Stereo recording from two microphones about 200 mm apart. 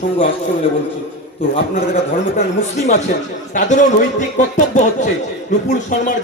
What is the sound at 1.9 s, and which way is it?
A man's voice, 35° left (ahead or behind).